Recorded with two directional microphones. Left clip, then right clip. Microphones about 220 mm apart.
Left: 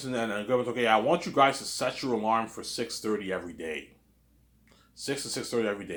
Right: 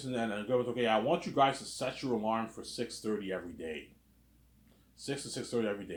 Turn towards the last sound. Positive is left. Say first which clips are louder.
# left 5 dB
turn(degrees=25)  # may be behind; listen again after turning